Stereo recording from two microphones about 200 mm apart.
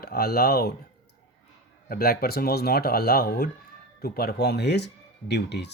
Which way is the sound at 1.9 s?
50° left (ahead or behind).